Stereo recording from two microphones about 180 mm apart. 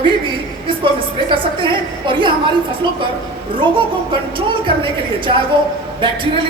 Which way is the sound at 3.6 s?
25° right (ahead or behind).